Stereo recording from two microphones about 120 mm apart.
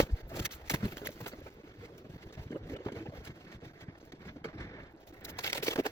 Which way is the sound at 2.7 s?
20° left (ahead or behind).